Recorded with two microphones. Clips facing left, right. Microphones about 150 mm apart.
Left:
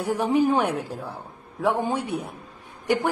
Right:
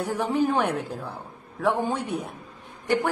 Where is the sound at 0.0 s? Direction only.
10° left (ahead or behind).